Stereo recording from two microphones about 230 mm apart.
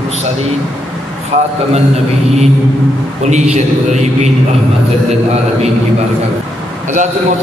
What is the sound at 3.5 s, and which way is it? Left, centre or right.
Speech, right.